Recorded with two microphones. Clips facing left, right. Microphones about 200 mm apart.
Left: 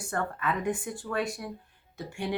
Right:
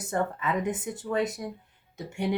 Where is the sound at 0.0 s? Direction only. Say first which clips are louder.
Right 3 dB; 20° right (ahead or behind).